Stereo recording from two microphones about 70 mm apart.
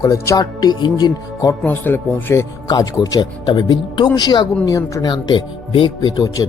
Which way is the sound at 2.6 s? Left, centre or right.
Left.